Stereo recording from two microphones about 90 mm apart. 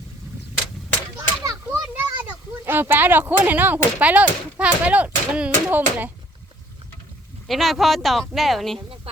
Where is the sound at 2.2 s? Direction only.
25° right (ahead or behind).